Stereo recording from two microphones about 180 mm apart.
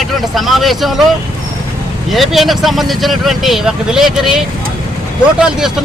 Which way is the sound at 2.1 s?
Centre (ahead or behind).